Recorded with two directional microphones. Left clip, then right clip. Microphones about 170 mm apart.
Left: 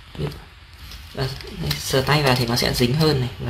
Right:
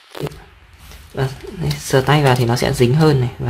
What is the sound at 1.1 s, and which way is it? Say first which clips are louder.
Speech: right 5 dB; 45° right (ahead or behind).